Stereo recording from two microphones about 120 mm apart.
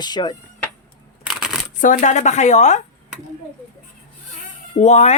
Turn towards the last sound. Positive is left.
turn(degrees=65)  # may be behind; listen again after turning